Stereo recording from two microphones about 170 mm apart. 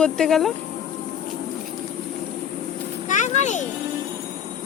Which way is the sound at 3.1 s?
45° left (ahead or behind).